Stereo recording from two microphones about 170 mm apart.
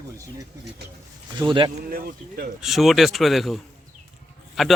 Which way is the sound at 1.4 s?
30° right (ahead or behind).